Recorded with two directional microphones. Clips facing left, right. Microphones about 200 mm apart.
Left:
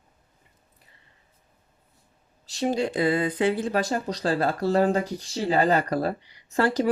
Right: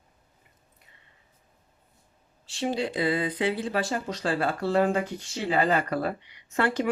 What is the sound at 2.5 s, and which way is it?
Speech, 40° left (ahead or behind).